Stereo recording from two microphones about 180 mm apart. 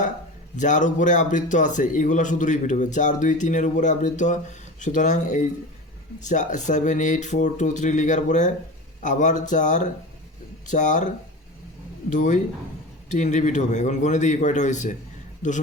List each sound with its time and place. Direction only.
0.5 s a man's voice: 45° left (ahead or behind)
12.1 s a man's voice: 45° left (ahead or behind)